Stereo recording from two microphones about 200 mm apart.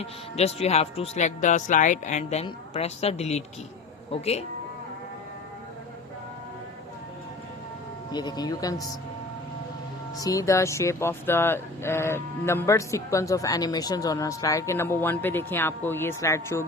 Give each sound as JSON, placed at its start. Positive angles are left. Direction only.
{"t": 0.0, "sound": "speech", "side_deg": 30}
{"t": 8.1, "sound": "speech", "side_deg": 20}
{"t": 10.2, "sound": "speech", "side_deg": 15}